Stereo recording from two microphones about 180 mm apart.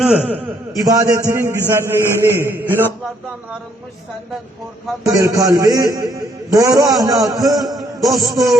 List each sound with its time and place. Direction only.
0.0 s a man's voice: 5° right (ahead or behind)
5.0 s a man's voice: 20° right (ahead or behind)